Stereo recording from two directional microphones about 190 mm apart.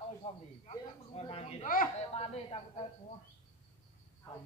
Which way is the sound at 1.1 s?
30° left (ahead or behind).